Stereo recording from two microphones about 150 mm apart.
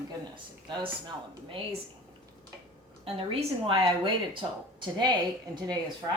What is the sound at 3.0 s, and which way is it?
Speech, 40° right (ahead or behind).